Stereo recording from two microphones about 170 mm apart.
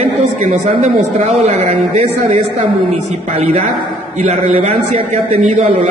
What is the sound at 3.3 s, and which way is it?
A man's voice, 40° right (ahead or behind).